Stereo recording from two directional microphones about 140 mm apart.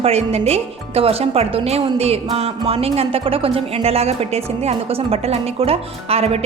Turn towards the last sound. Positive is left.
turn(degrees=-45)  # may be behind; listen again after turning